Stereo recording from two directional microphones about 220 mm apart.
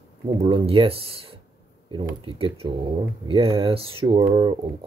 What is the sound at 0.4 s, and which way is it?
Speech, 25° right (ahead or behind).